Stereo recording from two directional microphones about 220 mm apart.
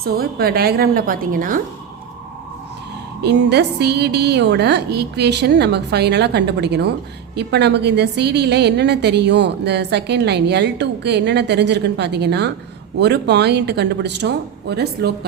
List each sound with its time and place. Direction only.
0.0 s a woman's voice: 45° right (ahead or behind)
3.2 s a woman's voice: 50° right (ahead or behind)